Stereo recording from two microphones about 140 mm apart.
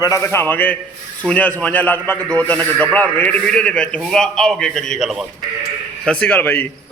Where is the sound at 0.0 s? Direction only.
20° left (ahead or behind).